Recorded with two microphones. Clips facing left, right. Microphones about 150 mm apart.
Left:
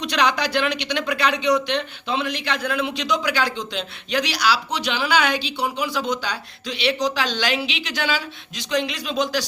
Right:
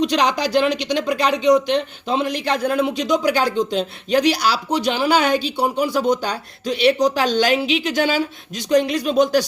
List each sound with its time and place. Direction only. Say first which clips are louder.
0.0 s speech: right 3 dB; 40° right (ahead or behind)